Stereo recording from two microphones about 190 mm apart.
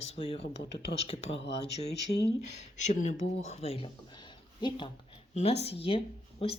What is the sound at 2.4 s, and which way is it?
Speech, 35° left (ahead or behind).